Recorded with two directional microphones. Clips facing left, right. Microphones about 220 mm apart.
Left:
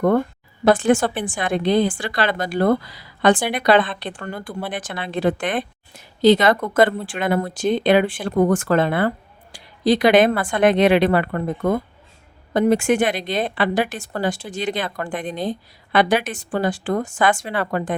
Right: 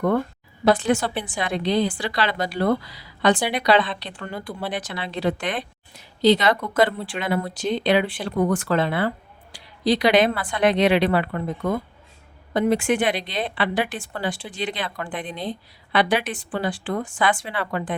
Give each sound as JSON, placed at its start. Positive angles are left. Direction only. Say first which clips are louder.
{"t": 0.6, "sound": "a woman's voice", "louder": "left 4 dB", "side_deg": 50}